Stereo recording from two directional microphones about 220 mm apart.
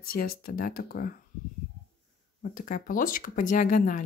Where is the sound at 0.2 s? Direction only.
40° left (ahead or behind).